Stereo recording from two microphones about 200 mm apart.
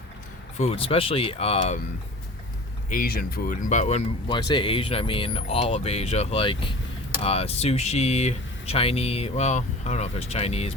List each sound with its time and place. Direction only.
0.6 s speech: 30° left (ahead or behind)
2.9 s speech: 45° left (ahead or behind); by 10.8 s 30° left (ahead or behind)